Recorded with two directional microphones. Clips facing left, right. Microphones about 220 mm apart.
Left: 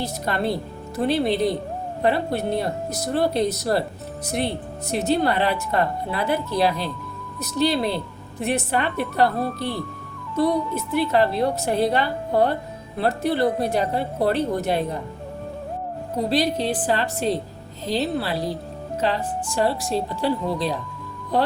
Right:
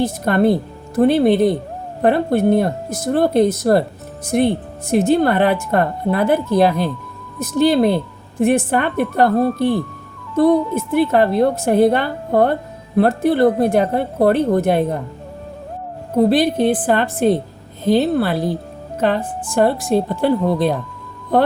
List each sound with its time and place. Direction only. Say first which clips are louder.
0.0 s speech: right 9 dB; 50° right (ahead or behind)
16.1 s speech: right 8 dB; 55° right (ahead or behind)